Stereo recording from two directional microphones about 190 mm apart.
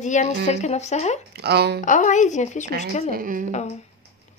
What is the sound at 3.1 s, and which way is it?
Speech, 45° right (ahead or behind).